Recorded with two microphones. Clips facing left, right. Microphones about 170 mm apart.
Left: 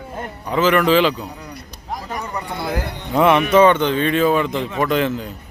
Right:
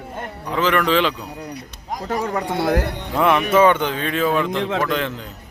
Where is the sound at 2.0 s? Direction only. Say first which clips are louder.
Right 7 dB; 90° right; by 2.9 s 70° right (ahead or behind).